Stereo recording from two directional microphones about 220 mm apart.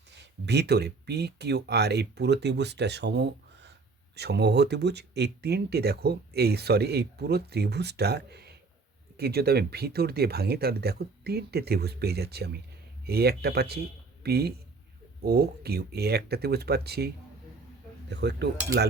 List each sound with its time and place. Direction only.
0.1 s speech: 50° right (ahead or behind)
18.1 s speech: 50° right (ahead or behind)